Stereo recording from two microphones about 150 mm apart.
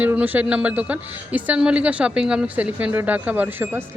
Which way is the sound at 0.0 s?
10° right (ahead or behind).